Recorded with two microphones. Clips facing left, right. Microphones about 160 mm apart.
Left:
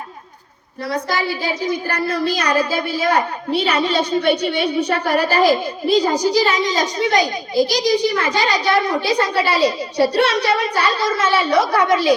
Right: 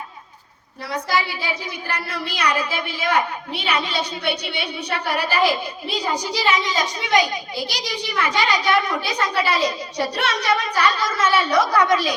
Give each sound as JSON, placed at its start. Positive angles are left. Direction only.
{"t": 0.9, "sound": "a woman's voice", "side_deg": 40}